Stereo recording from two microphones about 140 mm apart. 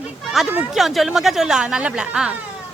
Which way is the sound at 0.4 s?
Centre (ahead or behind).